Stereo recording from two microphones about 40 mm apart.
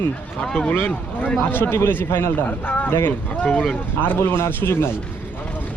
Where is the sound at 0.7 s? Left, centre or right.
Left.